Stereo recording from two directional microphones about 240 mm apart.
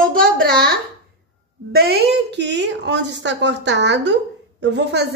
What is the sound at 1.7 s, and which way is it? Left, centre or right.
A woman's voice, right.